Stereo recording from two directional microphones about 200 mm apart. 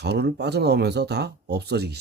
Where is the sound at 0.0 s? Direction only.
55° right (ahead or behind).